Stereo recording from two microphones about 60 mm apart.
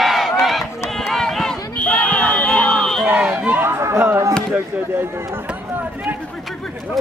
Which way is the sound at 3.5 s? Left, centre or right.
Right.